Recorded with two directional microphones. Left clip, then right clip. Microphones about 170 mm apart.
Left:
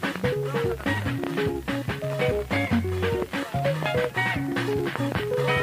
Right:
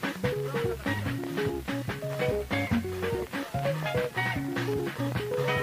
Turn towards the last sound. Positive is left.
turn(degrees=35)  # may be behind; listen again after turning